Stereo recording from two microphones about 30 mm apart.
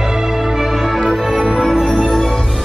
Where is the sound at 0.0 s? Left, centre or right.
Centre.